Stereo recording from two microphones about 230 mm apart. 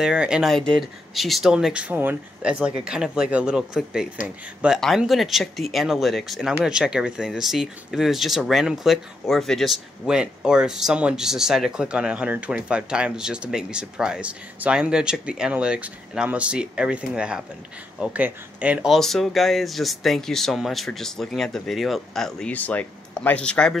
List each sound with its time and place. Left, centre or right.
0.0 s speech: centre